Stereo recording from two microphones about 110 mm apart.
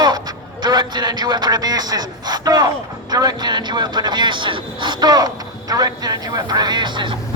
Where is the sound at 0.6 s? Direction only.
40° right (ahead or behind).